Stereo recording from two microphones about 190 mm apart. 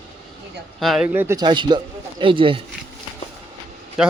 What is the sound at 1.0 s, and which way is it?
Speech, 15° right (ahead or behind).